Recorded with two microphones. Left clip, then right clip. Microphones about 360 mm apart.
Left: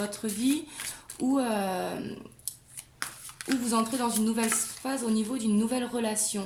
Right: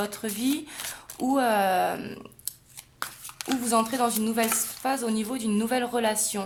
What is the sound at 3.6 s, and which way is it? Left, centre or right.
Speech, right.